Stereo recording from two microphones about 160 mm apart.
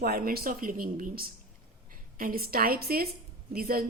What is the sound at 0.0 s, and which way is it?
Speech, 65° right (ahead or behind).